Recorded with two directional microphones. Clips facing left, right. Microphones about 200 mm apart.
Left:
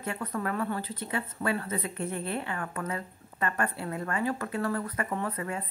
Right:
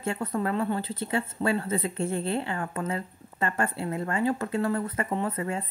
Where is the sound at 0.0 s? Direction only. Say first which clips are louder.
Right 4 dB; 25° right (ahead or behind).